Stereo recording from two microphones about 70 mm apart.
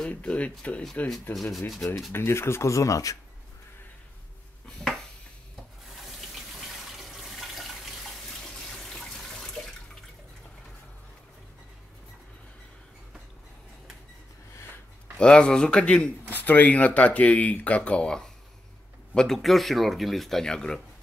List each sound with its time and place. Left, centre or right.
0.1 s speech: centre
1.3 s speech: centre
2.1 s speech: left
5.9 s water tap: centre
6.9 s water: centre
8.6 s water: centre
15.1 s speech: centre
16.3 s speech: left